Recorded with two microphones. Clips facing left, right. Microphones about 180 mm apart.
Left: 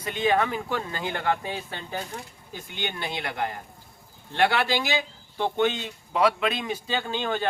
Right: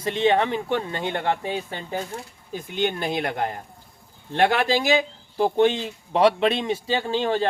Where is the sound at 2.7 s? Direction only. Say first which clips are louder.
Right 8 dB; 45° right (ahead or behind).